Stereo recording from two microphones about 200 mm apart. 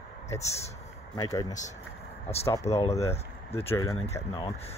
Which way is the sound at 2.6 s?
30° left (ahead or behind).